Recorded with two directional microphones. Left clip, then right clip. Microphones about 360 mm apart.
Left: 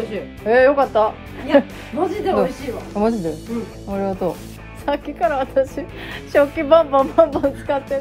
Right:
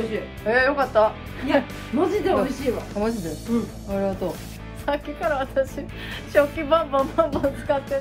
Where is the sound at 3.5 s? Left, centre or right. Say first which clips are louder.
Right 1 dB; centre.